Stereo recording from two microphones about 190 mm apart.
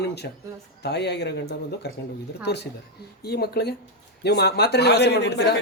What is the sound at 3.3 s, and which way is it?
Speech, 55° left (ahead or behind).